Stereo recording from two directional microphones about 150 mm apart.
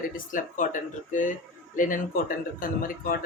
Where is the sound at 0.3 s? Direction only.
60° left (ahead or behind).